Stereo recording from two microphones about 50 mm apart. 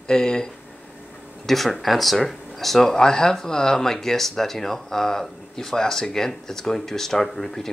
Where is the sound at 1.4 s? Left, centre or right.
Centre.